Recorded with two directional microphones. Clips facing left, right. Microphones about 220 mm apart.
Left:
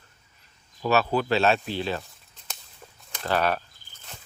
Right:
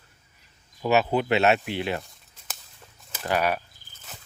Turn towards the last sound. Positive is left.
turn(degrees=-10)  # may be behind; listen again after turning